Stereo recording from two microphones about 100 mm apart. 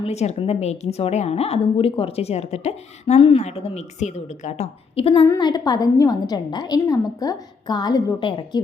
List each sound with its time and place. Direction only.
0.0 s a woman's voice: 90° left
3.2 s a woman's voice: 70° left (ahead or behind)
5.4 s a woman's voice: 45° left (ahead or behind)
8.2 s a woman's voice: 55° left (ahead or behind)